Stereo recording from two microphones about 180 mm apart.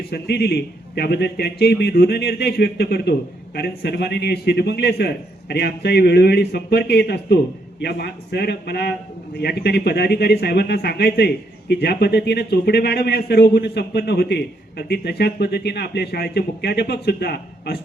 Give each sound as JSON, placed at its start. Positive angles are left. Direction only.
{"t": 0.1, "sound": "a man's voice", "side_deg": 65}